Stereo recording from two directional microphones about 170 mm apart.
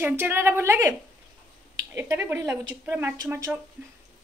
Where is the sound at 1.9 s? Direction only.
15° right (ahead or behind).